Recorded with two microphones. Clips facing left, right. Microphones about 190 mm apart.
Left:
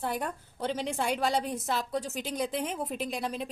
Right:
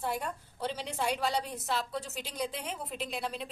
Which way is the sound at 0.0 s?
50° left (ahead or behind).